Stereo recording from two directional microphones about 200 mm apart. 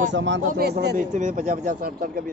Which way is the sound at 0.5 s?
50° right (ahead or behind).